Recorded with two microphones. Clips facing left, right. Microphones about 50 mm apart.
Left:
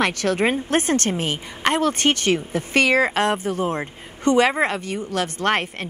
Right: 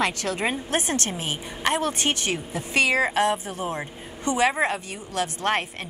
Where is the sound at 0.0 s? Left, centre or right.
Left.